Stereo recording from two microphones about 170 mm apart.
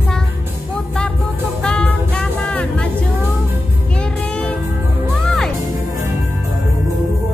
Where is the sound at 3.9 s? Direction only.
5° left (ahead or behind).